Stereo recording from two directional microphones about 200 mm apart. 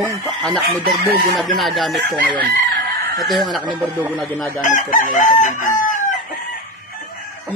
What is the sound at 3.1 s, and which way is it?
Speech, centre (ahead or behind).